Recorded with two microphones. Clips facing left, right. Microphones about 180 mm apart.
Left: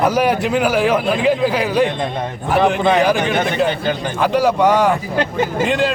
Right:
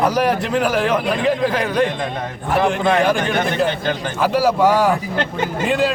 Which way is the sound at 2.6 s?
20° left (ahead or behind).